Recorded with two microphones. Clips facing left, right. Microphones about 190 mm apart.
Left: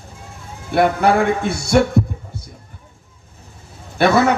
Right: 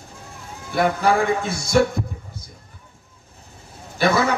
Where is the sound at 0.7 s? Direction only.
65° left (ahead or behind).